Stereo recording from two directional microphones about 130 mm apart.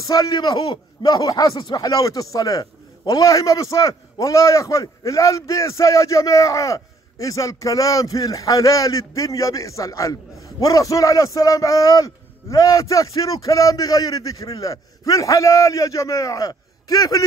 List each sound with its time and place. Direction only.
0.0 s a man's voice: 30° left (ahead or behind)